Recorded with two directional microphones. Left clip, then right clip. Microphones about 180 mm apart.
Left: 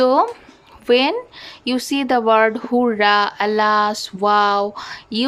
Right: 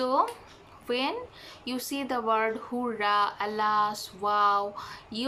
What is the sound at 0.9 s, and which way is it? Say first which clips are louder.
Speech: left 14 dB; 60° left (ahead or behind).